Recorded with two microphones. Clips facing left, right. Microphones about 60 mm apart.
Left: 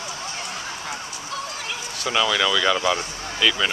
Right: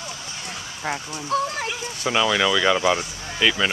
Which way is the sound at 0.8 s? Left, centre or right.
Right.